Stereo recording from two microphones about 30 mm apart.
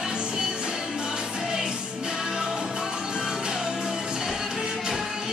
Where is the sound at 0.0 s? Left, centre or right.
Right.